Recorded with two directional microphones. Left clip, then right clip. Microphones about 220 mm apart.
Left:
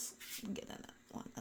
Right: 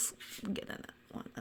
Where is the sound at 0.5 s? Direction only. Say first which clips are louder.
Right 6 dB; 20° right (ahead or behind).